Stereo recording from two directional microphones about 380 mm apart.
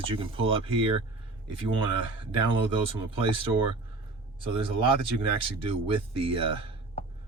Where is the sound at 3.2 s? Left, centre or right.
Right.